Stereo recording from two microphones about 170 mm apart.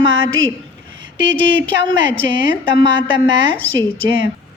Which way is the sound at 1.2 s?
90° right.